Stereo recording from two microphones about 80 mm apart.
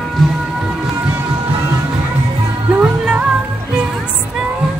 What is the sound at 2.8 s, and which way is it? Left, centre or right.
Music, centre.